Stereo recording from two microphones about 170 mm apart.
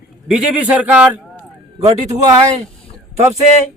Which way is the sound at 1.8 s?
20° right (ahead or behind).